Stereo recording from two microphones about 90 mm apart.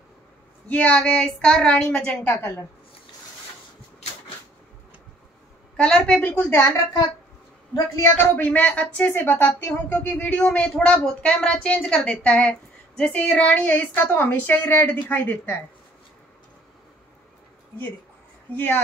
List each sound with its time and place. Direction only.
0.7 s a woman's voice: 15° left (ahead or behind)
5.8 s a woman's voice: 10° left (ahead or behind)
8.0 s a woman's voice: 20° left (ahead or behind)
18.5 s a woman's voice: 20° left (ahead or behind)